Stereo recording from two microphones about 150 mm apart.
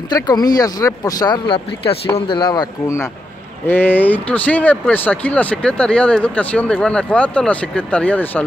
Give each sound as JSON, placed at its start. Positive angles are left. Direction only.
{"t": 0.1, "sound": "speech", "side_deg": 25}
{"t": 3.6, "sound": "speech", "side_deg": 15}